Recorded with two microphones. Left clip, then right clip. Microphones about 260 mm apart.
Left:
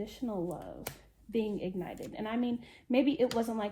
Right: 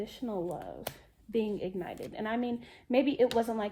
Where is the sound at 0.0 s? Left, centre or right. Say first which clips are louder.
Right 1 dB; right.